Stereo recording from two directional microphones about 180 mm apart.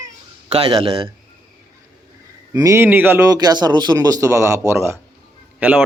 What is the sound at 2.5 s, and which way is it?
Speech, 15° right (ahead or behind).